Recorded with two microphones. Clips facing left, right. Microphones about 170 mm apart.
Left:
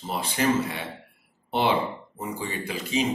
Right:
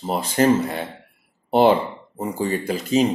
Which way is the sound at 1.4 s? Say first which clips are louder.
Right 9 dB; 45° right (ahead or behind).